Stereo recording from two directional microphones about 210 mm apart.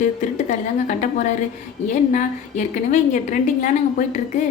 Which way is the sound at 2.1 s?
35° left (ahead or behind).